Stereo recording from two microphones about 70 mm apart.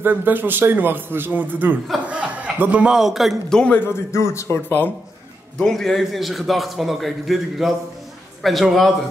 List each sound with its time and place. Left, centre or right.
0.0 s a man's voice: right
2.9 s a man's voice: centre
3.4 s a man's voice: centre
3.7 s speech: left
4.1 s speech: left
4.6 s speech: left
5.6 s a man's voice: centre